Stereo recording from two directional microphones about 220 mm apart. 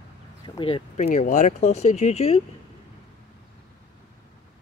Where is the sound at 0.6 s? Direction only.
25° left (ahead or behind).